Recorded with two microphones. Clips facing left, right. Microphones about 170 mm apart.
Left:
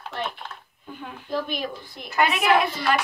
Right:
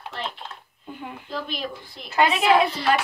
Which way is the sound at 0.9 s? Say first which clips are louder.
Right 2 dB; 15° right (ahead or behind).